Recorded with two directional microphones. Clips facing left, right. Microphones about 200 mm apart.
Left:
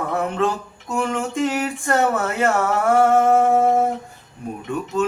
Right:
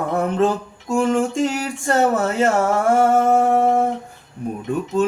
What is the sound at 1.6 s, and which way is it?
Speech, 30° right (ahead or behind).